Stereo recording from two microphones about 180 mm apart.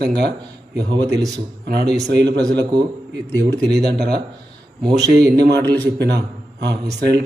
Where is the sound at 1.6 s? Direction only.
65° right (ahead or behind).